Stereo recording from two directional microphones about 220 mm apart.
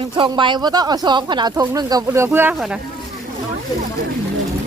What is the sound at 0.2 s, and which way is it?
Speech, 20° right (ahead or behind).